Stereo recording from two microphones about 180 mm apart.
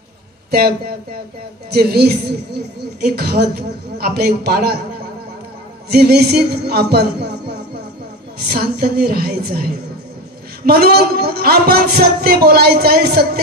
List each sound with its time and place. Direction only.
0.5 s a man's voice: 60° right (ahead or behind)
5.9 s a man's voice: 65° right (ahead or behind)
8.5 s a man's voice: 60° right (ahead or behind)